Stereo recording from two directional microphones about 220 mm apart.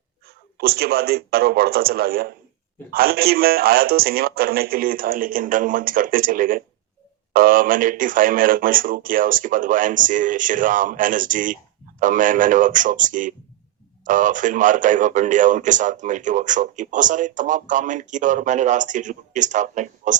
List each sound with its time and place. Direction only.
0.6 s a man's voice: 45° right (ahead or behind)